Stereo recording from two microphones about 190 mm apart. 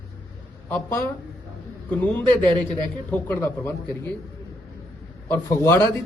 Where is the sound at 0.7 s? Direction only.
10° left (ahead or behind).